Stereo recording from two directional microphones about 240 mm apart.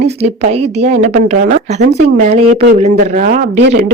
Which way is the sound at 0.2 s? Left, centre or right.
Right.